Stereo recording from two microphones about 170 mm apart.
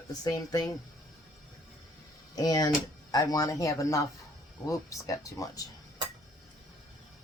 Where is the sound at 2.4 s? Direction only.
20° left (ahead or behind).